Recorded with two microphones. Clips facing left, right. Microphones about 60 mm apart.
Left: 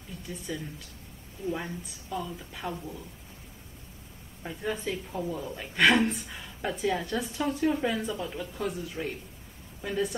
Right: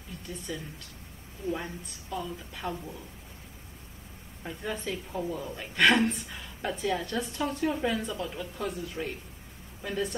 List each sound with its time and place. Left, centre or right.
0.5 s a woman's voice: centre
4.4 s a woman's voice: centre